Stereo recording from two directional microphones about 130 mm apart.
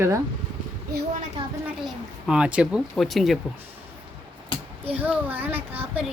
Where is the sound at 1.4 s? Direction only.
40° right (ahead or behind).